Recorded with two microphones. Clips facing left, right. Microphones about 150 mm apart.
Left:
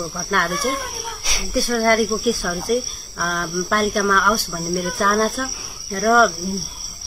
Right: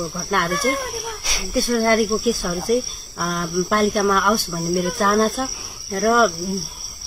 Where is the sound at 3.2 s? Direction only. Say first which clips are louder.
Right 1 dB; 25° right (ahead or behind).